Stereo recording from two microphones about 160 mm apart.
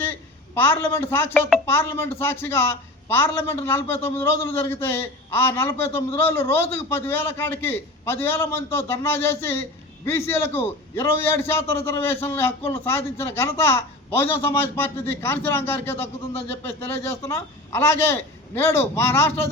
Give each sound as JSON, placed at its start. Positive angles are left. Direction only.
{"t": 0.0, "sound": "a woman's voice", "side_deg": 15}